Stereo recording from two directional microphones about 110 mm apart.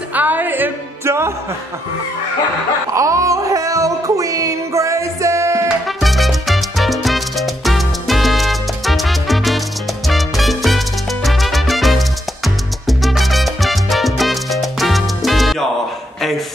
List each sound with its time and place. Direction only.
0.1 s music: 15° right (ahead or behind)
2.9 s music: 30° right (ahead or behind)
5.7 s music: centre (ahead or behind)
12.8 s salsa music: centre (ahead or behind)